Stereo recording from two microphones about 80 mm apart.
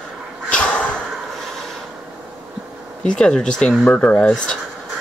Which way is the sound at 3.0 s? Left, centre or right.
Centre.